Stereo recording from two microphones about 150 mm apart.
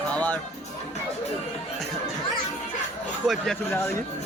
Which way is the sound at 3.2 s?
Centre (ahead or behind).